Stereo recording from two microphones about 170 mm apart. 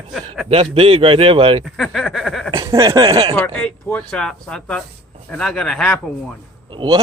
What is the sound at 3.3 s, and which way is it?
Speech, 10° left (ahead or behind).